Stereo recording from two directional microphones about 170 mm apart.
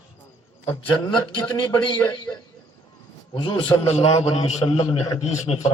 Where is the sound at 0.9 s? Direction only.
25° left (ahead or behind).